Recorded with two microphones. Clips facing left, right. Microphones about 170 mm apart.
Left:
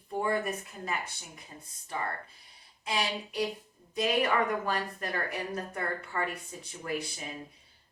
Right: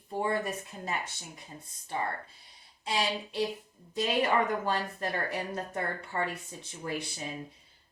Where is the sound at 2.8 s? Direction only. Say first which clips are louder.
Right 1 dB; 25° right (ahead or behind).